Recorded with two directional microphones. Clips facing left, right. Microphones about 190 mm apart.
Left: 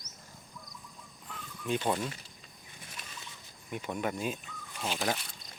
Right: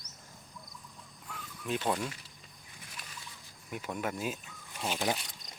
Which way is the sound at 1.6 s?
Centre (ahead or behind).